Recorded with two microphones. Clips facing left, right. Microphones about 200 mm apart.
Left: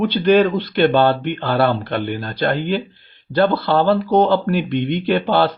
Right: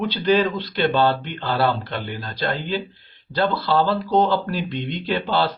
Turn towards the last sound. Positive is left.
turn(degrees=55)  # may be behind; listen again after turning